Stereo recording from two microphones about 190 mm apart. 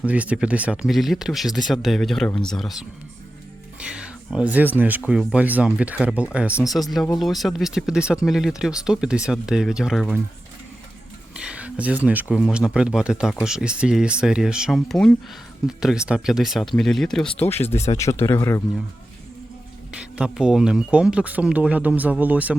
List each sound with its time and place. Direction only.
0.0 s speech: 5° right (ahead or behind)
3.8 s a sound: 5° right (ahead or behind)
4.8 s speech: 10° right (ahead or behind)
11.3 s speech: 5° right (ahead or behind); by 17.7 s 10° left (ahead or behind)
17.7 s speech: 35° left (ahead or behind)
17.9 s speech: 15° left (ahead or behind)
20.0 s speech: 5° right (ahead or behind)